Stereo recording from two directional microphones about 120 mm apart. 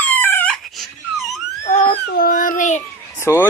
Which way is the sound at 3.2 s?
20° left (ahead or behind).